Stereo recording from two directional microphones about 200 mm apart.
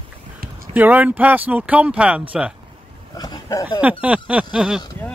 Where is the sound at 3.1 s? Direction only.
20° left (ahead or behind).